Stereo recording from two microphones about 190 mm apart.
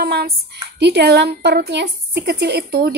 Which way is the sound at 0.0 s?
55° right (ahead or behind).